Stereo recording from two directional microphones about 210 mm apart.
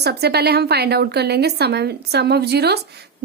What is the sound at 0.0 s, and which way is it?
A woman's voice, 50° right (ahead or behind).